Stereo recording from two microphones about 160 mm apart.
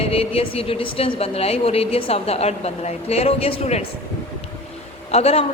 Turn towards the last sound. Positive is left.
turn(degrees=40)  # may be behind; listen again after turning